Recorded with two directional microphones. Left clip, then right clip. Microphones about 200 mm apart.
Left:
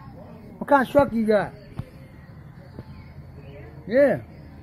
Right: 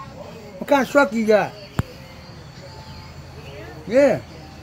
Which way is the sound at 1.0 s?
5° right (ahead or behind).